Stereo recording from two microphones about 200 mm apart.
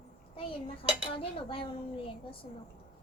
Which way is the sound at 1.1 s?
25° left (ahead or behind).